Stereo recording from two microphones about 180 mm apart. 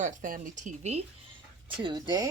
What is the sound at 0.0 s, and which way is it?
Speech, 50° right (ahead or behind).